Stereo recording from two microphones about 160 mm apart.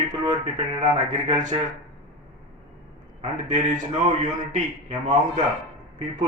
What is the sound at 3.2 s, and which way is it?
Speech, 50° right (ahead or behind).